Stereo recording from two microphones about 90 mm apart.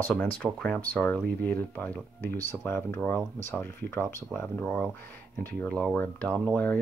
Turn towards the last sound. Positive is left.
turn(degrees=15)  # may be behind; listen again after turning